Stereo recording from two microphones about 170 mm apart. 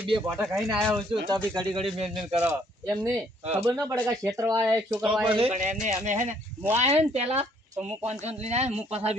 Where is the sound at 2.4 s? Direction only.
10° right (ahead or behind).